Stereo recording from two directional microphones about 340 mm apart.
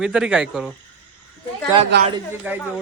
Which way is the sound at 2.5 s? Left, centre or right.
Centre.